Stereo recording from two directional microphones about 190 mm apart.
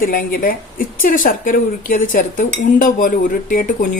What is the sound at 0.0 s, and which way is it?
Speech, 50° left (ahead or behind).